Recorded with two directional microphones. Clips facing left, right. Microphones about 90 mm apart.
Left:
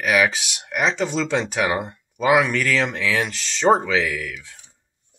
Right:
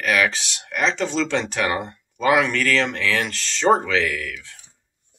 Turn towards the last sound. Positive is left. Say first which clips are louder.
# even
turn(degrees=5)  # may be behind; listen again after turning